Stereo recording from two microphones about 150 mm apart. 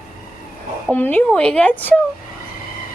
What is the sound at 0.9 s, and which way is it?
A woman's voice, 15° left (ahead or behind).